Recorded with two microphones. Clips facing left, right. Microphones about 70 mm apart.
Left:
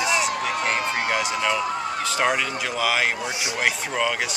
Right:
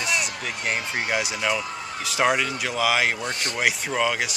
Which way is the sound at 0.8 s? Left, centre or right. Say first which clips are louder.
Left 4 dB; left.